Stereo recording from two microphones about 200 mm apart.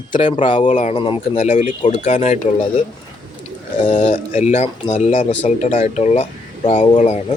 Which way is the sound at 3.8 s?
30° left (ahead or behind).